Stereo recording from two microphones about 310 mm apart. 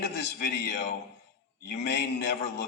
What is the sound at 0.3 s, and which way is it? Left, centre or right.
A man's voice, left.